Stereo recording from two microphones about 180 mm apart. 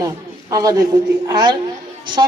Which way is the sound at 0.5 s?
20° right (ahead or behind).